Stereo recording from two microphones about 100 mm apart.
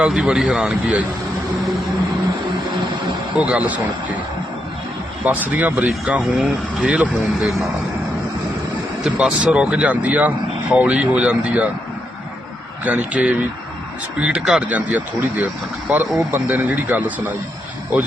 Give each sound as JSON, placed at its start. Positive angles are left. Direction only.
{"t": 0.0, "sound": "speech", "side_deg": -5}
{"t": 3.3, "sound": "speech", "side_deg": -10}
{"t": 5.2, "sound": "speech", "side_deg": -15}
{"t": 9.0, "sound": "speech", "side_deg": -10}
{"t": 12.8, "sound": "speech", "side_deg": -10}